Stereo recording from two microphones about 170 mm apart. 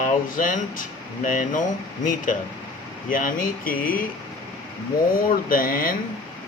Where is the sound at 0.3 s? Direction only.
50° left (ahead or behind).